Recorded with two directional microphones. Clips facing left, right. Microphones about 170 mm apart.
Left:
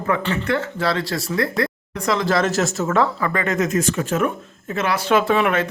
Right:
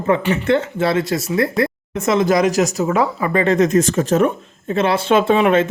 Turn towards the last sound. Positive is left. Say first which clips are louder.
# right 4 dB
turn(degrees=-25)  # may be behind; listen again after turning